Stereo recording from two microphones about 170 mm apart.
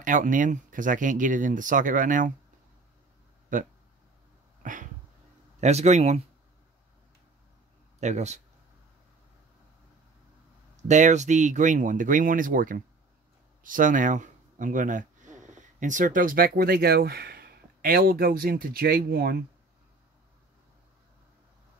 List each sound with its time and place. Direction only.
0.0 s speech: 50° right (ahead or behind)
3.5 s speech: 50° right (ahead or behind)
8.0 s speech: 45° right (ahead or behind)
10.9 s speech: 45° right (ahead or behind); by 19.3 s 65° right (ahead or behind)